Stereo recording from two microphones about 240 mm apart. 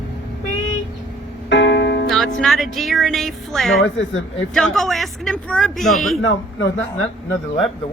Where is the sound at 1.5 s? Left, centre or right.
Left.